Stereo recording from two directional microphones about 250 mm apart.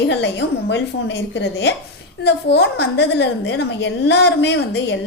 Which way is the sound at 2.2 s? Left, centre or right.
Left.